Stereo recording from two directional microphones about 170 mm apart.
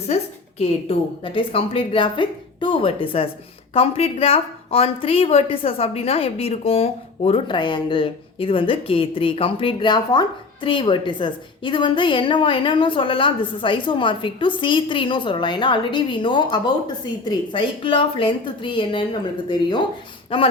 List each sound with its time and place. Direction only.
0.1 s a woman's voice: 40° left (ahead or behind)
20.3 s a woman's voice: 30° left (ahead or behind)